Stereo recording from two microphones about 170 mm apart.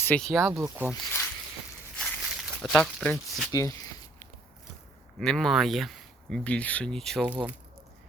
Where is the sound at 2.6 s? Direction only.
5° left (ahead or behind).